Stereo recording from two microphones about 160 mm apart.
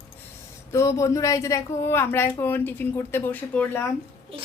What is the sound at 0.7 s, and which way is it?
Speech, 20° left (ahead or behind).